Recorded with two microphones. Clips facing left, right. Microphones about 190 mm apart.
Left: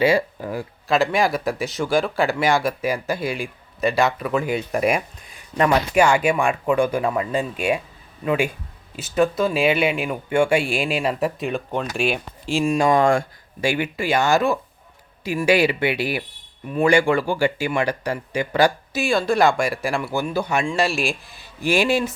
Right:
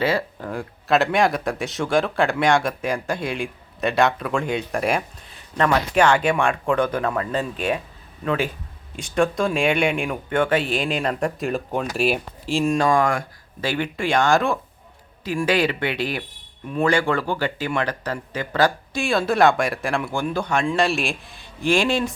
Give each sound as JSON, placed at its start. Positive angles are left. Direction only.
{"t": 0.0, "sound": "speech", "side_deg": 15}
{"t": 12.8, "sound": "speech", "side_deg": 25}
{"t": 13.6, "sound": "speech", "side_deg": 10}
{"t": 19.0, "sound": "speech", "side_deg": 0}